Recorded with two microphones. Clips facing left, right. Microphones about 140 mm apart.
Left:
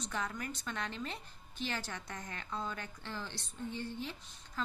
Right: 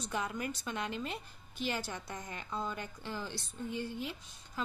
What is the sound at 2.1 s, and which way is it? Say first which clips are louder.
Speech: right 2 dB; 15° right (ahead or behind).